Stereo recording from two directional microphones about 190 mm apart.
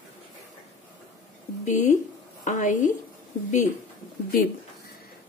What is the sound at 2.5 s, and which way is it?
Speech, 40° left (ahead or behind).